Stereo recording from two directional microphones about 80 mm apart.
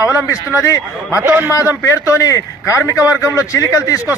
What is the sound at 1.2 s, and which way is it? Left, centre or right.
Speech, right.